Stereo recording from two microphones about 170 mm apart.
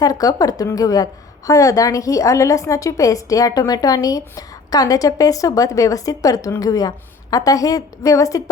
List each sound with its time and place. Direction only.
0.0 s a woman's voice: 20° left (ahead or behind)